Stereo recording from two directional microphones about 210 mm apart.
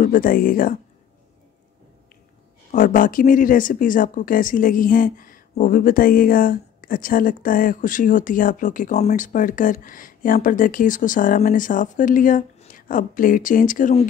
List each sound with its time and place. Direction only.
0.0 s speech: 40° left (ahead or behind)
2.7 s speech: 40° left (ahead or behind)